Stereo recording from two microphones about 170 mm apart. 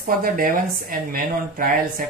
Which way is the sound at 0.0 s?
55° right (ahead or behind).